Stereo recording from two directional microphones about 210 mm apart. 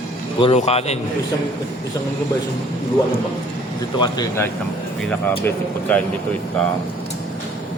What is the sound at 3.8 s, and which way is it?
Speech, 20° left (ahead or behind).